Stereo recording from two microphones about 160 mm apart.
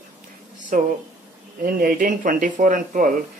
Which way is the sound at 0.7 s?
55° right (ahead or behind).